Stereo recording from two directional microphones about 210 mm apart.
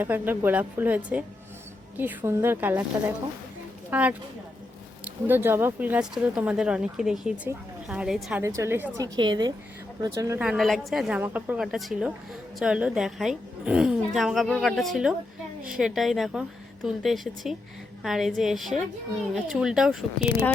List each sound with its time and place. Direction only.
0.0 s a woman's voice: 10° right (ahead or behind)
3.8 s a woman's voice: 5° right (ahead or behind)
10.4 s speech: centre (ahead or behind)